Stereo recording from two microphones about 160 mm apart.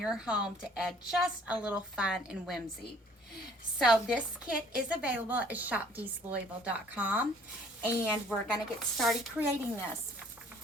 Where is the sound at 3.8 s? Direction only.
5° right (ahead or behind).